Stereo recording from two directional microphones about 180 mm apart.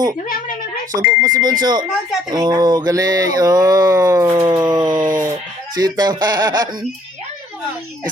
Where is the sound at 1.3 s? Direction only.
20° right (ahead or behind).